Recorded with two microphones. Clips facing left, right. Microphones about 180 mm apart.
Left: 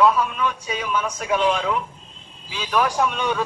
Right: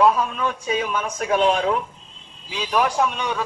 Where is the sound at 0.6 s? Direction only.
50° right (ahead or behind).